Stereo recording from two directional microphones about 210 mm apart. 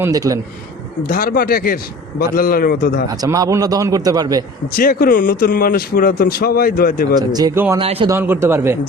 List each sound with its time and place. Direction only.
0.0 s a man's voice: 15° right (ahead or behind)
1.0 s speech: 40° left (ahead or behind)
3.1 s a man's voice: 15° right (ahead or behind)
4.8 s speech: 45° left (ahead or behind)
7.2 s a man's voice: 20° right (ahead or behind)
7.8 s a man's voice: 25° right (ahead or behind)
8.1 s a man's voice: 10° right (ahead or behind)